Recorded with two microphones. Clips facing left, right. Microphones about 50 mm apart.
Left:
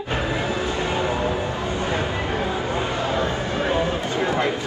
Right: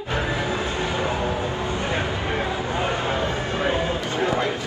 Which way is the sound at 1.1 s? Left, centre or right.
Left.